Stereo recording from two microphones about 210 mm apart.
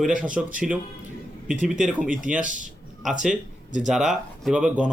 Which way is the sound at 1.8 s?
5° right (ahead or behind).